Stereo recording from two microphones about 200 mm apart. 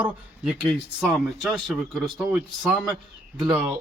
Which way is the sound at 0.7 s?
Centre (ahead or behind).